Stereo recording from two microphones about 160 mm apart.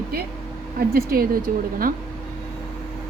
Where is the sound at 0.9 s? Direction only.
70° right (ahead or behind).